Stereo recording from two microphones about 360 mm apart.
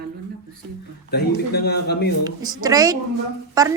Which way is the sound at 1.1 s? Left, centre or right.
Left.